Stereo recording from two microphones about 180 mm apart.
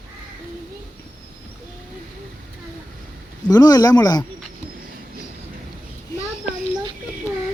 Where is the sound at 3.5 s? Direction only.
20° left (ahead or behind).